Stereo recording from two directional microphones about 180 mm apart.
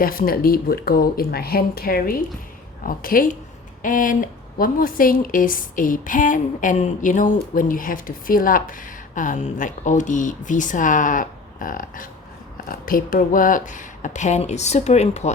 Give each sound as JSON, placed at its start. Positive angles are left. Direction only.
{"t": 0.0, "sound": "a woman's voice", "side_deg": 55}